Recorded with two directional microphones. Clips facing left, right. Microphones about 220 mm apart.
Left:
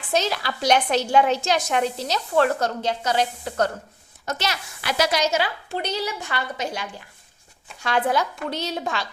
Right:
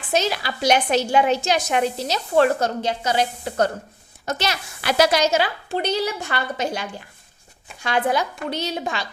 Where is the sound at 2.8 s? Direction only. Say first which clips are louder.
Right 1 dB; centre (ahead or behind).